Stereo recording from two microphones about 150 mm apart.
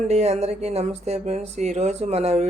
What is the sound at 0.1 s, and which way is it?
Speech, 45° right (ahead or behind).